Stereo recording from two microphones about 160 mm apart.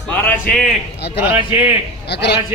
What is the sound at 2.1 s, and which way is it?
Speech, 90° left.